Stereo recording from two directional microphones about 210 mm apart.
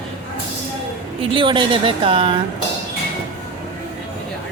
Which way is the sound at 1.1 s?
25° right (ahead or behind).